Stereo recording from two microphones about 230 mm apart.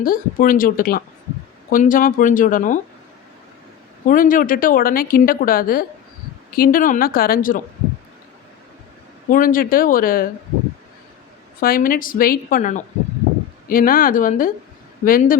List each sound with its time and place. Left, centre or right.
0.0 s a woman's voice: left
4.0 s a woman's voice: left
9.3 s a woman's voice: left
11.6 s a woman's voice: left